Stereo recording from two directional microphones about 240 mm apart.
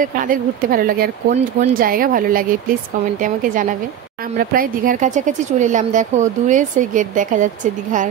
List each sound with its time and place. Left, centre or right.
0.0 s speech: right